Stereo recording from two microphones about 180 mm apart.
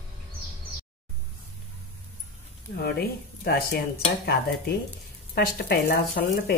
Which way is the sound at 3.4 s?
60° left (ahead or behind).